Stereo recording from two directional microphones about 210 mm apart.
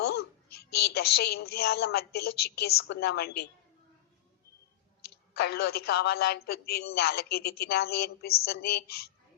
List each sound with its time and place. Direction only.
0.0 s speech: 50° left (ahead or behind)
5.3 s speech: 50° left (ahead or behind)